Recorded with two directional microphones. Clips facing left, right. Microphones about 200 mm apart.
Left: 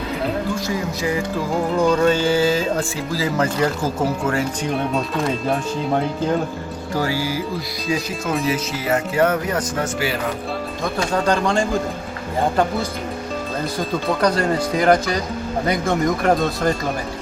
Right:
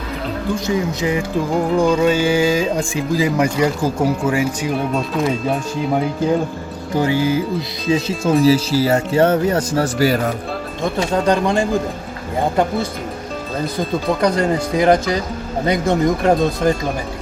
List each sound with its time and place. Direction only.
0.7 s speech: 20° right (ahead or behind)
6.9 s speech: 20° right (ahead or behind); by 10.3 s 40° right (ahead or behind)
10.9 s speech: 20° right (ahead or behind)
14.1 s speech: 10° right (ahead or behind)